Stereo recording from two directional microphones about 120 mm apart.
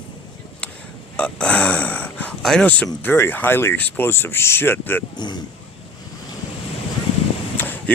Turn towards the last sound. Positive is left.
turn(degrees=15)  # may be behind; listen again after turning